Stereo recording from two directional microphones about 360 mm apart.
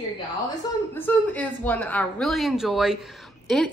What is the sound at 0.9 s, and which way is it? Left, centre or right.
A woman's voice, centre.